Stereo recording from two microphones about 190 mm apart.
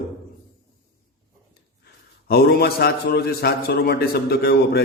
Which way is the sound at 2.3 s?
55° left (ahead or behind).